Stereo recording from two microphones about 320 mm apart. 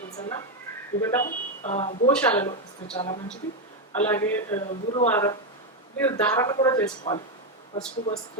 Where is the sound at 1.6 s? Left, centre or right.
Left.